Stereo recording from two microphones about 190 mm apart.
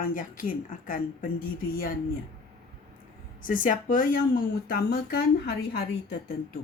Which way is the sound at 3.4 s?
45° left (ahead or behind).